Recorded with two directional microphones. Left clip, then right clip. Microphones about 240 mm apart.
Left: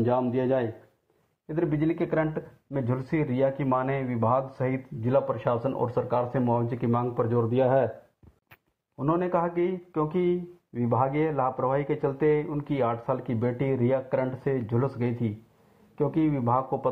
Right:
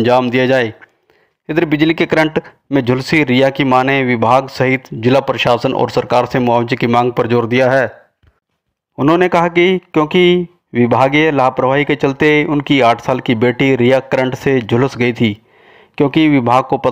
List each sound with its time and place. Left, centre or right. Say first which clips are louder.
0.3 s speech: right 13 dB; right
8.9 s speech: right 15 dB; right